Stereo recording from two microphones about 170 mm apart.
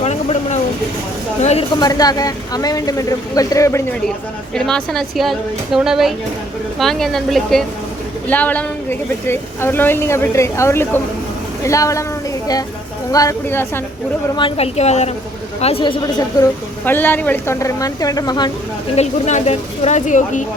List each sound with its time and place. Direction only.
0.0 s vehicle: 40° left (ahead or behind)
1.4 s a woman's voice: 40° left (ahead or behind)
1.8 s speech: 20° left (ahead or behind)
4.5 s speech: 5° left (ahead or behind); by 12.0 s 20° left (ahead or behind)
13.1 s speech: 20° left (ahead or behind)
14.3 s a woman's voice: 30° left (ahead or behind)
16.8 s speech: 10° left (ahead or behind)
18.9 s speech: 40° left (ahead or behind)